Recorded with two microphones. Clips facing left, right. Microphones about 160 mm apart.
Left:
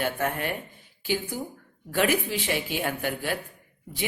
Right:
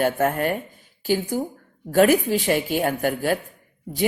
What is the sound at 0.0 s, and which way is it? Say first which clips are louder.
Speech: right 7 dB; 45° right (ahead or behind).